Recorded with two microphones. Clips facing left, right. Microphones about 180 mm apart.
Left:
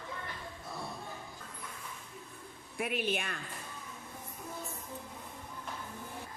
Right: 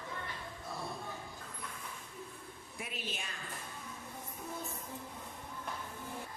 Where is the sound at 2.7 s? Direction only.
65° left (ahead or behind).